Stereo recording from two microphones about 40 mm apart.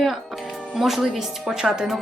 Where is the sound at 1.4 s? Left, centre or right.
Centre.